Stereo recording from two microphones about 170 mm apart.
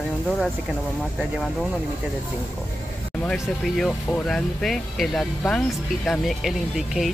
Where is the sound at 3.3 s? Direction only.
5° left (ahead or behind).